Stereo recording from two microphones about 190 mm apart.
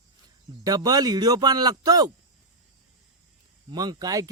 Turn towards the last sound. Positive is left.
turn(degrees=-20)  # may be behind; listen again after turning